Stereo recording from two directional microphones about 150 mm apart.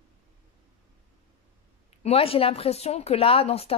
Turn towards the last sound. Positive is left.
turn(degrees=40)  # may be behind; listen again after turning